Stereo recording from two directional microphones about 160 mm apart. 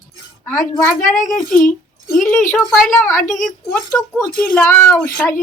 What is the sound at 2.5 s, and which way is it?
Speech, 15° left (ahead or behind).